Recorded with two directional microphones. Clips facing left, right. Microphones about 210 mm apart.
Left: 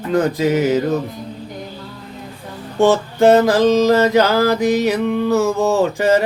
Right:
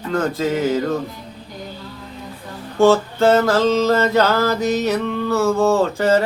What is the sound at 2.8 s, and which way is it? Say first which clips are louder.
Mantra: left 1 dB; 15° left (ahead or behind).